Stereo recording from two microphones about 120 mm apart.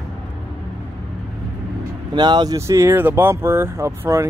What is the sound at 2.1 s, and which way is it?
Speech, 35° right (ahead or behind).